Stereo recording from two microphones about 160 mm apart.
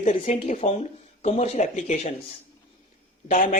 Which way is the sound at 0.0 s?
50° left (ahead or behind).